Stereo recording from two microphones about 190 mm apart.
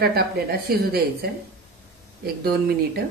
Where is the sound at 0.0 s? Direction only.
55° right (ahead or behind).